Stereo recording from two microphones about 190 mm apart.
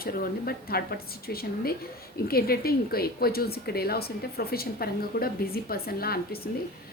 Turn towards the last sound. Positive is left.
turn(degrees=55)  # may be behind; listen again after turning